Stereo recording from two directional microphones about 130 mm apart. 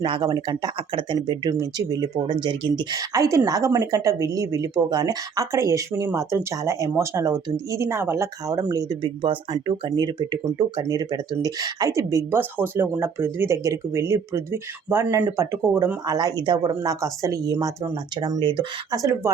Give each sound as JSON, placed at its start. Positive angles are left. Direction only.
{"t": 0.0, "sound": "speech", "side_deg": -35}
{"t": 1.5, "sound": "speech", "side_deg": -30}
{"t": 9.0, "sound": "speech", "side_deg": -40}